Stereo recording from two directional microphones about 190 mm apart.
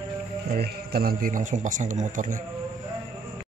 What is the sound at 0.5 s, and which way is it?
Speech, 55° right (ahead or behind).